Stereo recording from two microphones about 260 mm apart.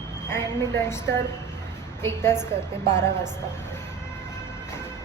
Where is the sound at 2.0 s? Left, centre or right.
Centre.